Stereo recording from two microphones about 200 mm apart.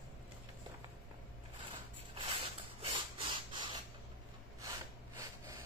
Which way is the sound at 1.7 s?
25° right (ahead or behind).